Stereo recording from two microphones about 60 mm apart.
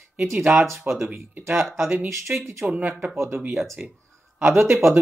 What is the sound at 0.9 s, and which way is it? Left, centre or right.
Speech, right.